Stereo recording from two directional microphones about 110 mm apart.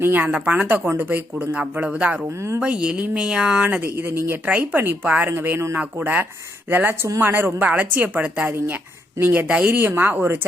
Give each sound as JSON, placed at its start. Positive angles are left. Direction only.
{"t": 0.0, "sound": "speech", "side_deg": -15}
{"t": 2.3, "sound": "a woman's voice", "side_deg": -25}
{"t": 2.6, "sound": "a woman's voice", "side_deg": -10}